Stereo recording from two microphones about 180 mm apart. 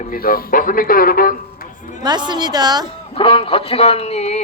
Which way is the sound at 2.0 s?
25° right (ahead or behind).